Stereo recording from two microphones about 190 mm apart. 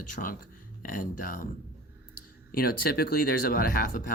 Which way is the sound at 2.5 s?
50° left (ahead or behind).